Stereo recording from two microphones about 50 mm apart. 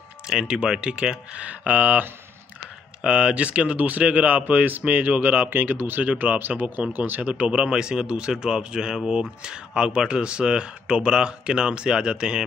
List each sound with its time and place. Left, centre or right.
0.3 s speech: centre
1.7 s speech: right
3.0 s speech: centre